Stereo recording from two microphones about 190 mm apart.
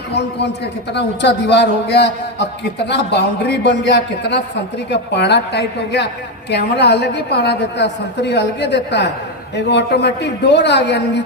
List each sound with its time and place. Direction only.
0.1 s a man's voice: 60° left (ahead or behind)